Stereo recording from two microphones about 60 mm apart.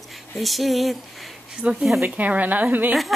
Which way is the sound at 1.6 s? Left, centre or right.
Right.